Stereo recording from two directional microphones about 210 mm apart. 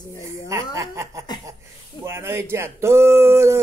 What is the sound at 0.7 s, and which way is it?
Speech, 15° right (ahead or behind).